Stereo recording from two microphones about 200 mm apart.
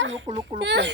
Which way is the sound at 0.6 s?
60° right (ahead or behind).